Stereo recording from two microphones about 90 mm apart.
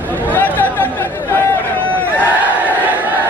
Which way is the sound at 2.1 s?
20° right (ahead or behind).